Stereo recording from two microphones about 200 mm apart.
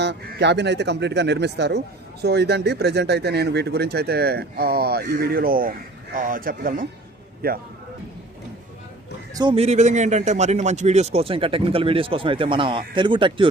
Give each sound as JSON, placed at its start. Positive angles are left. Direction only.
{"t": 0.0, "sound": "a man's voice", "side_deg": -60}
{"t": 9.3, "sound": "speech", "side_deg": -20}